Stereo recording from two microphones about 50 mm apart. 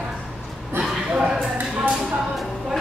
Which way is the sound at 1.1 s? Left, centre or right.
Centre.